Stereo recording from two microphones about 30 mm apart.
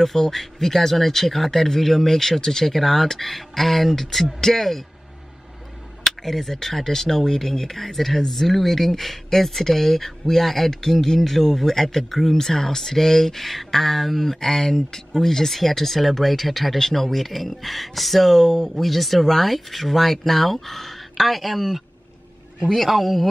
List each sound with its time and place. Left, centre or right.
0.0 s speech: centre
6.0 s speech: centre
22.7 s speech: centre